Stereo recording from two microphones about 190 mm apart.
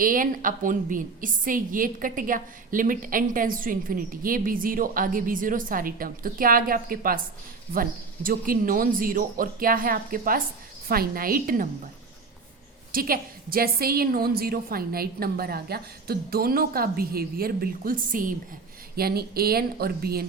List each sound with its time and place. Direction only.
0.0 s a woman's voice: 45° right (ahead or behind)
12.9 s a woman's voice: 50° right (ahead or behind)